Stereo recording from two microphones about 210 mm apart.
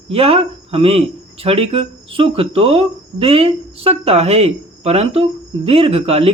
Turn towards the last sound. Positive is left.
turn(degrees=-25)  # may be behind; listen again after turning